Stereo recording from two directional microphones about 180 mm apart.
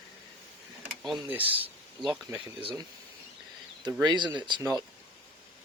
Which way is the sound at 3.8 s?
20° right (ahead or behind).